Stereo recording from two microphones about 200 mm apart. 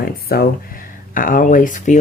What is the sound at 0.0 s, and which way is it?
Speech, 50° left (ahead or behind).